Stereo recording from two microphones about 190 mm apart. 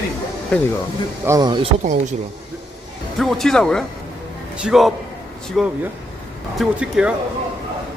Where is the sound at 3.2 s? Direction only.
Centre (ahead or behind).